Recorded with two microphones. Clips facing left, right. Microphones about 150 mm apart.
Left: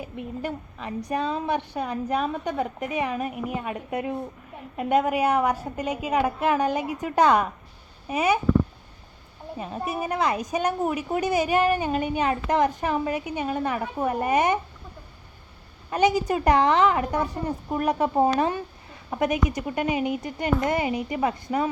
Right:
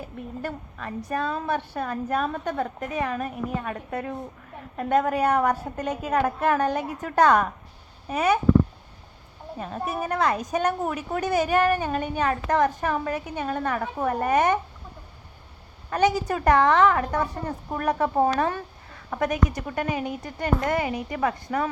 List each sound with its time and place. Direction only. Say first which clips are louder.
0.0 s a woman's voice: left 2 dB; 15° left (ahead or behind)
2.1 s a woman's voice: even; 5° left (ahead or behind)
9.6 s a woman's voice: even; 5° left (ahead or behind)
15.9 s a woman's voice: left 1 dB; 15° left (ahead or behind)